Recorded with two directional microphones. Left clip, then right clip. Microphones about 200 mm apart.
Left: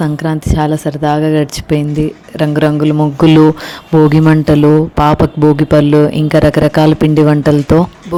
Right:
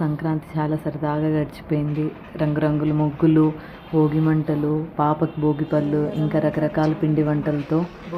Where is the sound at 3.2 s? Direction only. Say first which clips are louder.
Left 12 dB; 55° left (ahead or behind).